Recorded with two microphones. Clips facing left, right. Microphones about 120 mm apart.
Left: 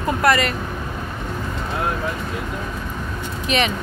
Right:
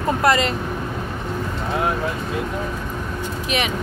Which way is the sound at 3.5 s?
10° right (ahead or behind).